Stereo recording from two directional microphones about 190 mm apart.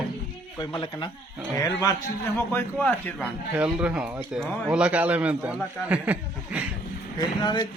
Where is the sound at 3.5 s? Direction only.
5° right (ahead or behind).